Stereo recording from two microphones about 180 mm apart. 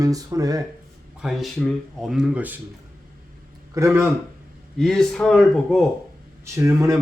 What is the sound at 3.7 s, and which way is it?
Speech, 15° right (ahead or behind).